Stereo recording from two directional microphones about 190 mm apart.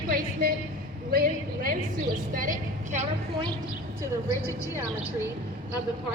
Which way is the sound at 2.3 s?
45° right (ahead or behind).